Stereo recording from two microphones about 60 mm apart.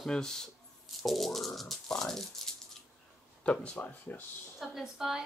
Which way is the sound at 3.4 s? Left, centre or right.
Left.